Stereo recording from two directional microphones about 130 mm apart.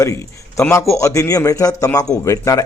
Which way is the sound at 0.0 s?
25° left (ahead or behind).